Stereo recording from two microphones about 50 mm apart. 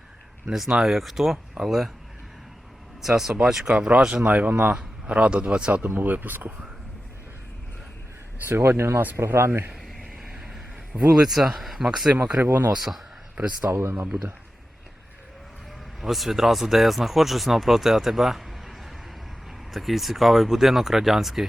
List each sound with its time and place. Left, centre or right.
0.5 s speech: centre
3.0 s speech: centre
3.8 s speech: right
5.8 s speech: right
8.4 s speech: right
11.1 s speech: centre
12.1 s speech: right
12.7 s speech: centre
13.3 s speech: right
13.7 s speech: right
16.0 s speech: centre